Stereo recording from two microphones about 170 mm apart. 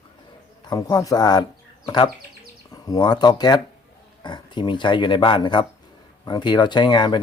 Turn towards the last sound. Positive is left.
turn(degrees=25)  # may be behind; listen again after turning